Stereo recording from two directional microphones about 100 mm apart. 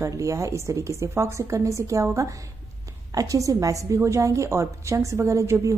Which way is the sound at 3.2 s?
35° right (ahead or behind).